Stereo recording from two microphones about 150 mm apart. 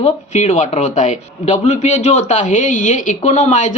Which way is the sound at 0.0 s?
50° left (ahead or behind).